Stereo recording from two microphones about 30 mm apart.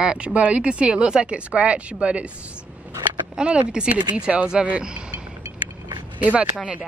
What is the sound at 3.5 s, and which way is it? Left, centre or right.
Speech, right.